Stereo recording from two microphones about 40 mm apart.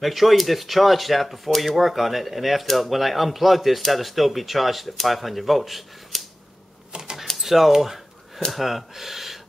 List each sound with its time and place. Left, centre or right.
0.0 s speech: centre
6.9 s typing: centre
7.2 s speech: centre